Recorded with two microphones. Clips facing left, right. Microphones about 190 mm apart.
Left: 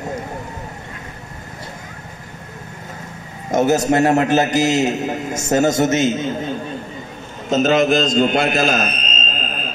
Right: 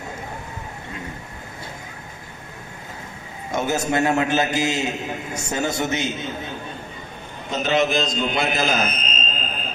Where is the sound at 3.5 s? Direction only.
40° left (ahead or behind).